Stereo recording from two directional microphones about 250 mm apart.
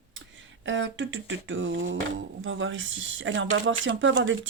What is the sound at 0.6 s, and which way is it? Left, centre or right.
Speech, right.